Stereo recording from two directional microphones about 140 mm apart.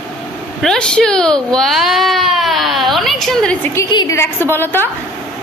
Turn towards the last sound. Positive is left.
turn(degrees=15)  # may be behind; listen again after turning